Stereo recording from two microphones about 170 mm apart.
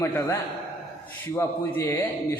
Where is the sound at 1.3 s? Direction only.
15° left (ahead or behind).